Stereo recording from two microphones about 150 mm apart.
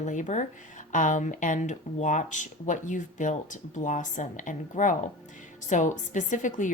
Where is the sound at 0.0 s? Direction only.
55° left (ahead or behind).